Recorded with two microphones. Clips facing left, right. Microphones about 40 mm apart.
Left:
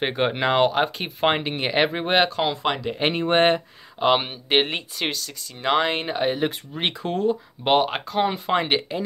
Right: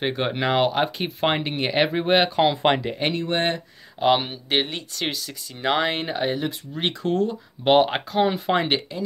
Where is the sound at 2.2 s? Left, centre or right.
Centre.